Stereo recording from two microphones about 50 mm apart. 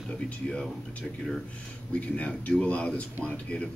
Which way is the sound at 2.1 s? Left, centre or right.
Left.